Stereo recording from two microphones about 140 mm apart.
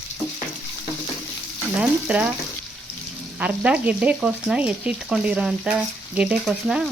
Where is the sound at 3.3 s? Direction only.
10° right (ahead or behind).